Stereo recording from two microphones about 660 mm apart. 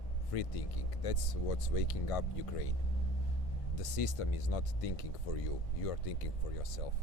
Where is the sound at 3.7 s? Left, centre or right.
Left.